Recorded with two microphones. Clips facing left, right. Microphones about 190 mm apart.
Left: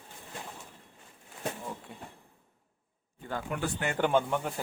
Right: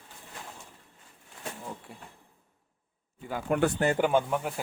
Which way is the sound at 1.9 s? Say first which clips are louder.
Left 1 dB; 5° right (ahead or behind).